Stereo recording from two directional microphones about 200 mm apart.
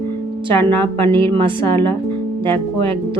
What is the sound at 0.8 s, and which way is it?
Speech, 25° right (ahead or behind).